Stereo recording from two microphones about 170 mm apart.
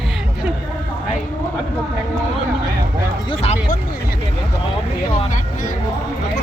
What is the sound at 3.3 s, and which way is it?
Music, 35° left (ahead or behind).